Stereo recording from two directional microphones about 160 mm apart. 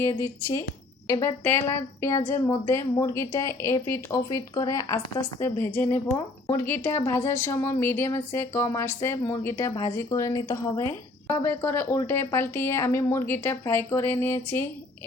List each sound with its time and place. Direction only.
0.0 s a woman's voice: 15° left (ahead or behind)